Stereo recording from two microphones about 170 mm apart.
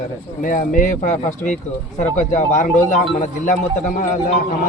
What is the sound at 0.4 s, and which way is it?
A man's voice, 50° left (ahead or behind).